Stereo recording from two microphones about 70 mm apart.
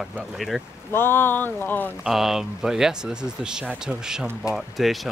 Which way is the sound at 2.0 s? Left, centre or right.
Centre.